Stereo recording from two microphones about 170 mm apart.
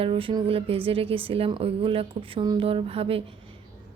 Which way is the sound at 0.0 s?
30° right (ahead or behind).